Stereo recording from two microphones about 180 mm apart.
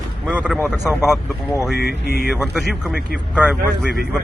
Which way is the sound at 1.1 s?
15° left (ahead or behind).